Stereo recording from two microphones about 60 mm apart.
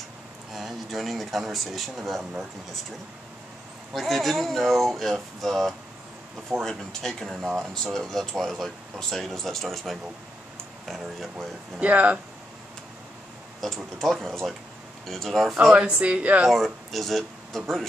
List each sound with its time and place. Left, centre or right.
0.5 s speech: centre
3.9 s speech: centre
11.8 s speech: right
13.6 s speech: centre
15.7 s speech: right
16.4 s speech: centre